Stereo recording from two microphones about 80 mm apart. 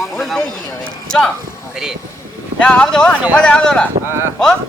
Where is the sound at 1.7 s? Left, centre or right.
Centre.